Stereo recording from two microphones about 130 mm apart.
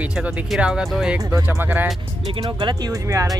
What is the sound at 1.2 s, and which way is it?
Speech, 20° right (ahead or behind).